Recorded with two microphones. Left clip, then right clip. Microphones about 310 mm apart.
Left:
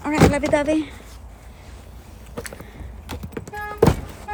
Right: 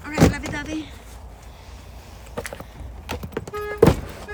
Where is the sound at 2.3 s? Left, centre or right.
Centre.